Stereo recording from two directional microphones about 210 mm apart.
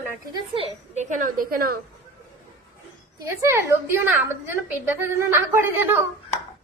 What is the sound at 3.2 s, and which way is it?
A woman's voice, 15° right (ahead or behind).